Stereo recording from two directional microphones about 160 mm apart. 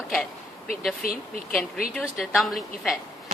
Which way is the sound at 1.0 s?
65° left (ahead or behind).